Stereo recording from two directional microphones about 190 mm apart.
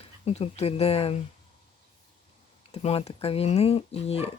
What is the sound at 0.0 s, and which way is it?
Speech, 30° left (ahead or behind).